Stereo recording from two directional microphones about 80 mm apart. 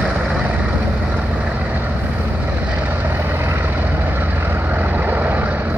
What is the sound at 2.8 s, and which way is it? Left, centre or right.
Vehicle, right.